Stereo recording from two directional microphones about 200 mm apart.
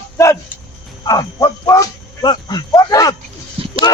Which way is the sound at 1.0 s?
20° left (ahead or behind).